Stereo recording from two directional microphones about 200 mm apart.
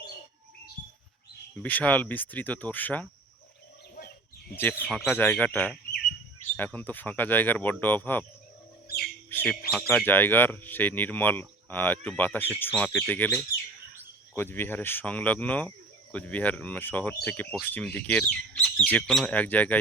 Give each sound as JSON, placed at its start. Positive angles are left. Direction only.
{"t": 1.6, "sound": "speech", "side_deg": 10}
{"t": 4.5, "sound": "speech", "side_deg": 10}
{"t": 9.3, "sound": "bird", "side_deg": 10}
{"t": 9.7, "sound": "speech", "side_deg": 0}